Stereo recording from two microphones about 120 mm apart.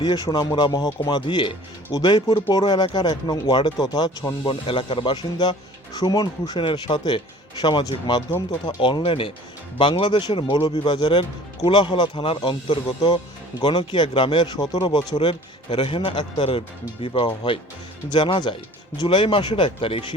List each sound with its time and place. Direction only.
0.0 s speech: 35° left (ahead or behind)
4.6 s speech: 45° left (ahead or behind)